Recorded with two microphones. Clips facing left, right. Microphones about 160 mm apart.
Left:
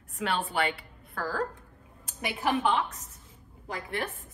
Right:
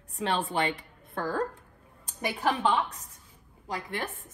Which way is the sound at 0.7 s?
25° right (ahead or behind).